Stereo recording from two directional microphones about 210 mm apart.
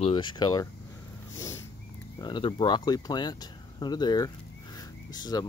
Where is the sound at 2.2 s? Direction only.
20° left (ahead or behind).